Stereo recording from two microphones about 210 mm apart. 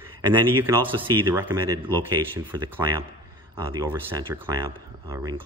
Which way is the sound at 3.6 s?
15° right (ahead or behind).